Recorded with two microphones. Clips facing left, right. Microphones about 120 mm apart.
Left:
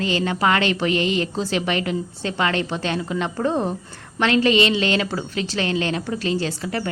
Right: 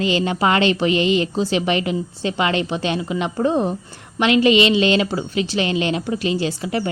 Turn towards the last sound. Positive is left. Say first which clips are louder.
# right 3 dB
turn(degrees=-15)  # may be behind; listen again after turning